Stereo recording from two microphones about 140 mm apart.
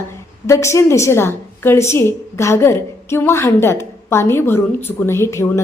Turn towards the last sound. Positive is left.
turn(degrees=20)  # may be behind; listen again after turning